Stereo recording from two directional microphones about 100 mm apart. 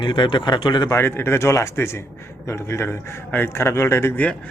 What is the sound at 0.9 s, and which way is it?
Speech, 25° left (ahead or behind).